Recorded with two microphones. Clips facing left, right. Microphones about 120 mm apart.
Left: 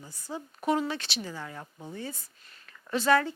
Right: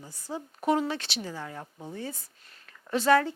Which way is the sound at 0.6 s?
45° right (ahead or behind).